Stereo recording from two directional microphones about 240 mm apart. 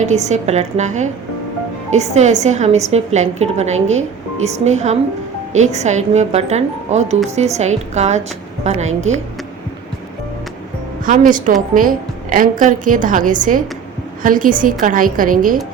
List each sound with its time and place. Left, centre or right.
0.0 s a woman's voice: right
11.0 s a woman's voice: right